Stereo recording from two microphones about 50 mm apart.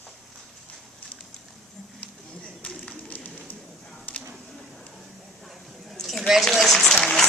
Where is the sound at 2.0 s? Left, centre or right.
Left.